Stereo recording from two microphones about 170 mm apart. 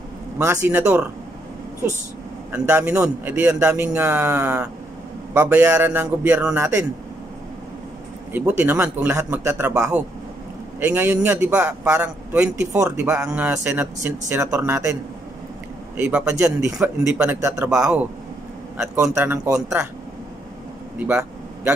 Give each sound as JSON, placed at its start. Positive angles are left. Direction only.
{"t": 0.4, "sound": "a man's voice", "side_deg": -10}
{"t": 2.5, "sound": "a man's voice", "side_deg": -10}
{"t": 8.3, "sound": "a man's voice", "side_deg": -10}
{"t": 16.0, "sound": "a man's voice", "side_deg": -10}
{"t": 19.1, "sound": "a man's voice", "side_deg": -15}
{"t": 21.1, "sound": "a sound", "side_deg": -5}